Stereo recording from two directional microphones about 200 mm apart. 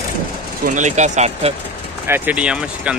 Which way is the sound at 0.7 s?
35° right (ahead or behind).